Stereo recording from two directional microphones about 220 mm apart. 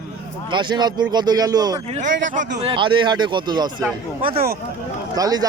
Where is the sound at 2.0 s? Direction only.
35° right (ahead or behind).